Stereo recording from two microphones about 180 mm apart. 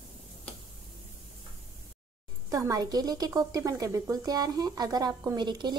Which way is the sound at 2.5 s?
20° right (ahead or behind).